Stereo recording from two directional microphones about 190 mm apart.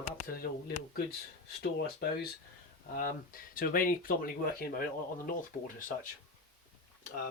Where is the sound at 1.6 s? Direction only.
60° left (ahead or behind).